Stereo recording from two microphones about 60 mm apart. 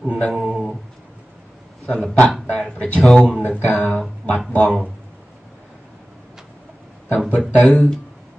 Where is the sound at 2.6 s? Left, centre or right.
Centre.